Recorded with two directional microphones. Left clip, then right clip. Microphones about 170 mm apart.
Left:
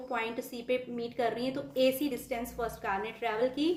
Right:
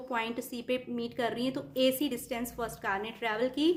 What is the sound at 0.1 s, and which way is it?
A woman's voice, 45° right (ahead or behind).